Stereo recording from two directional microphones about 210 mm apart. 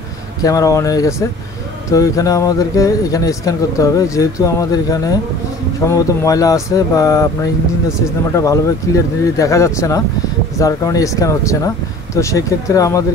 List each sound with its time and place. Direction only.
0.4 s speech: 15° left (ahead or behind)